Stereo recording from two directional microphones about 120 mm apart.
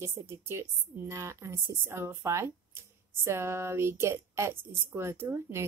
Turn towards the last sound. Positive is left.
turn(degrees=-20)  # may be behind; listen again after turning